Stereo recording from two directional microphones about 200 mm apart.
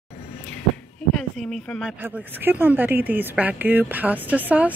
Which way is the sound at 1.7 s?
Centre (ahead or behind).